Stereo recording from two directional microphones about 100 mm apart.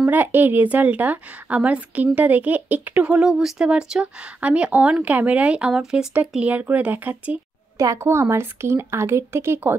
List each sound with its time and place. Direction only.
0.1 s speech: 20° right (ahead or behind)
7.7 s speech: 30° right (ahead or behind)